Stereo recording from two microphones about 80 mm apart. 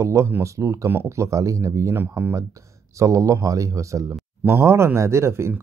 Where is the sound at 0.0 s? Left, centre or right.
Right.